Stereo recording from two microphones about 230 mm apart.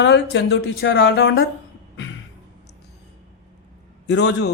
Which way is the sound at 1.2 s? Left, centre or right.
Left.